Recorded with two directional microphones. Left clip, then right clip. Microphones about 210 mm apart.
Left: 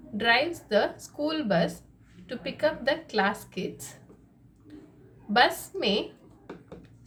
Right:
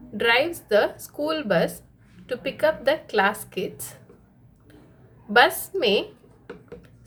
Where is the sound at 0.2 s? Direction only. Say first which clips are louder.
Right 3 dB; 30° right (ahead or behind).